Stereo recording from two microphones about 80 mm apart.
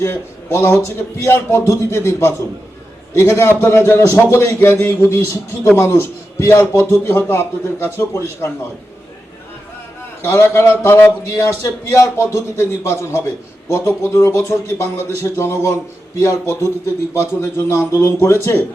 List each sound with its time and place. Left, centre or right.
0.0 s a man's voice: left
10.2 s a man's voice: left